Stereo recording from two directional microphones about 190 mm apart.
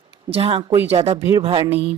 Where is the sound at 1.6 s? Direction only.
10° right (ahead or behind).